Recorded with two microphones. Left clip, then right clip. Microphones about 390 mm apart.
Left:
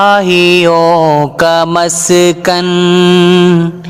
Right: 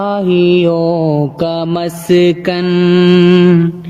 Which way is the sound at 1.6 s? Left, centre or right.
Centre.